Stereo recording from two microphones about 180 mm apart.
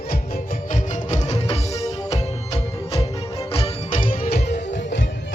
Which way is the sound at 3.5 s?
35° left (ahead or behind).